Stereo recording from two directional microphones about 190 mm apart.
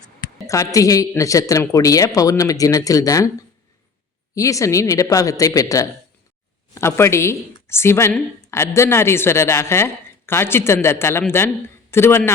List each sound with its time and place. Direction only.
0.4 s speech: 15° left (ahead or behind)
4.4 s speech: 15° left (ahead or behind)